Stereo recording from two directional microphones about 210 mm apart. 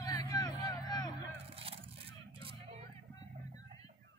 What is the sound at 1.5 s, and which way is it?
Vehicle, 25° right (ahead or behind).